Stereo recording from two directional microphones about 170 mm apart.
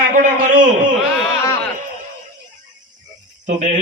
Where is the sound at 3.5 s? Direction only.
45° right (ahead or behind).